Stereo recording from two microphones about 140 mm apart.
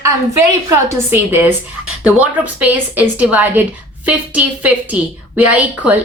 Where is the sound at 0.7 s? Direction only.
20° right (ahead or behind).